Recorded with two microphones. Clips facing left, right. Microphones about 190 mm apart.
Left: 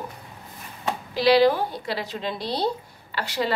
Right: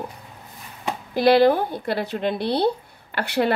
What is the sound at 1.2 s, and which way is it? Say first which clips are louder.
A woman's voice: right 2 dB; 50° right (ahead or behind).